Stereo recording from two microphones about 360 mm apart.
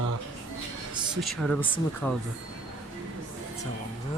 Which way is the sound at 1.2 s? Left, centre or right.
Centre.